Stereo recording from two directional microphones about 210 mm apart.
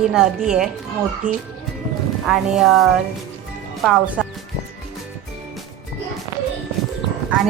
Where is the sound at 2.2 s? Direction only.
Centre (ahead or behind).